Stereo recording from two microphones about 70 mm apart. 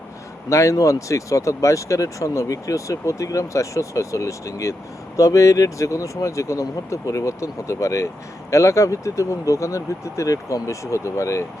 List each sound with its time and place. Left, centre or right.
0.5 s speech: left